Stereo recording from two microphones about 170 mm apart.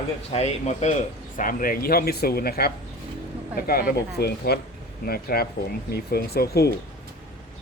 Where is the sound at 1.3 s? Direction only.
55° left (ahead or behind).